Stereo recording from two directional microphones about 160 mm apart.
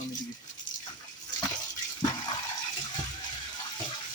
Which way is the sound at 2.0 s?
25° left (ahead or behind).